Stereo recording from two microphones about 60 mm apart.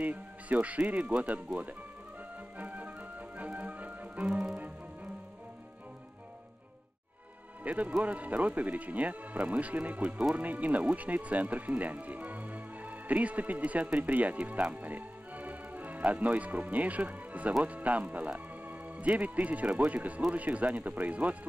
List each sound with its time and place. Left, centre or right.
0.0 s speech: right
2.6 s music: right
7.6 s speech: right